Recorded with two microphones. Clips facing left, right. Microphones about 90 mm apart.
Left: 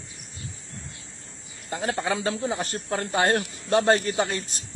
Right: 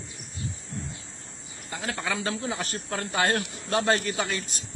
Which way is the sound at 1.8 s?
25° left (ahead or behind).